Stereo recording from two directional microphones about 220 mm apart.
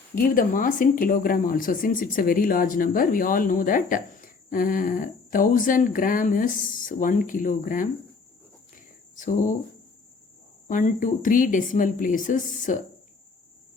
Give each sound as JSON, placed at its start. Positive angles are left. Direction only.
{"t": 0.2, "sound": "speech", "side_deg": 40}
{"t": 9.1, "sound": "speech", "side_deg": 35}
{"t": 10.7, "sound": "speech", "side_deg": 35}